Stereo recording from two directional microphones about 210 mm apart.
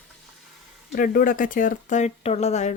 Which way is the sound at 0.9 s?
40° left (ahead or behind).